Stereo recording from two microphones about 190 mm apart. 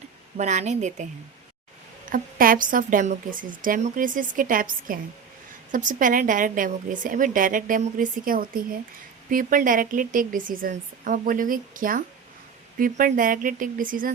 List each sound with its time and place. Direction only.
0.3 s a woman's voice: 40° right (ahead or behind)
2.0 s speech: 45° right (ahead or behind)